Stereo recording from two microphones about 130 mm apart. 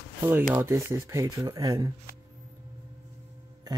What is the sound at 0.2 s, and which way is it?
Speech, 15° right (ahead or behind).